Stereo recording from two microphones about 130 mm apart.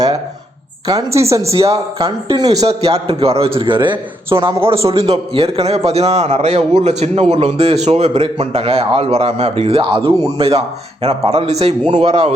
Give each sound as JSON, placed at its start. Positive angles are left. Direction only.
{"t": 0.9, "sound": "a woman's voice", "side_deg": -25}
{"t": 1.5, "sound": "a man's voice", "side_deg": -50}
{"t": 2.6, "sound": "a man's voice", "side_deg": -50}
{"t": 11.9, "sound": "a man's voice", "side_deg": -40}